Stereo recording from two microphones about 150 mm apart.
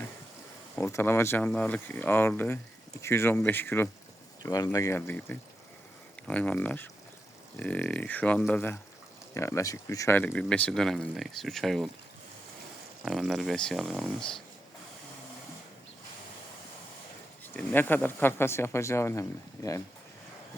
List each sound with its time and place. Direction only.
0.8 s speech: 15° left (ahead or behind)
9.3 s speech: 20° left (ahead or behind); by 11.9 s centre (ahead or behind)
13.1 s speech: centre (ahead or behind)
17.4 s speech: 10° left (ahead or behind)